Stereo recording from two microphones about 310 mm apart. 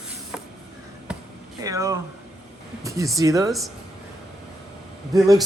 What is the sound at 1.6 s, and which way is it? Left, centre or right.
Speech, centre.